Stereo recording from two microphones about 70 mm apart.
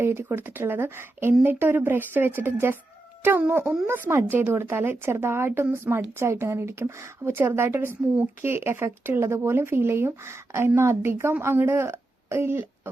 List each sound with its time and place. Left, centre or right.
0.0 s speech: right